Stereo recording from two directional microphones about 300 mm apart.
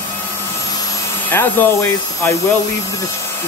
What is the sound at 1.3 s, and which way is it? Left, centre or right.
Speech, centre.